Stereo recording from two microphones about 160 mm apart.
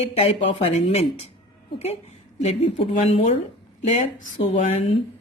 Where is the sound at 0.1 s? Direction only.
35° left (ahead or behind).